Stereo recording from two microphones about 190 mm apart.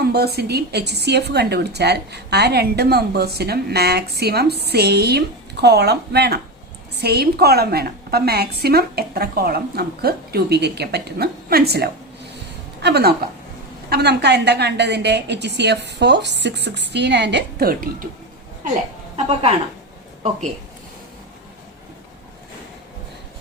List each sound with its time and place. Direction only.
0.0 s a woman's voice: 55° right (ahead or behind)
19.1 s a woman's voice: 30° right (ahead or behind)